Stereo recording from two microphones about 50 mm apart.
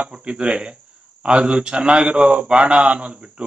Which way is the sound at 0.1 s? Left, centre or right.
Right.